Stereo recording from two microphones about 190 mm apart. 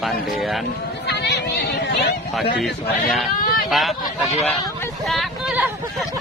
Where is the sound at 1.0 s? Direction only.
65° left (ahead or behind).